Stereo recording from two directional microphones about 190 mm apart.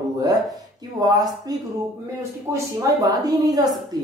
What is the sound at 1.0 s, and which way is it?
Speech, 20° right (ahead or behind).